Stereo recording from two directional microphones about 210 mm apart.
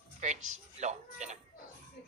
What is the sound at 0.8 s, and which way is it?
Speech, 35° right (ahead or behind).